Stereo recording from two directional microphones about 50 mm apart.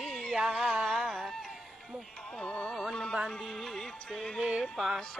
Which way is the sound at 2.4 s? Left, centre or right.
Left.